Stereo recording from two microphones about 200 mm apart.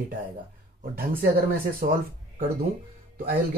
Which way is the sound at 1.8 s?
45° right (ahead or behind).